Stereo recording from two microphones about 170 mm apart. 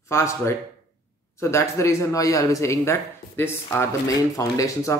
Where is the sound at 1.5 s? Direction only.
15° left (ahead or behind).